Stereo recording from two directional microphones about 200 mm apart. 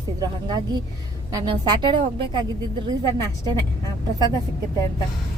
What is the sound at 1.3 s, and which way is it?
Speech, 25° right (ahead or behind).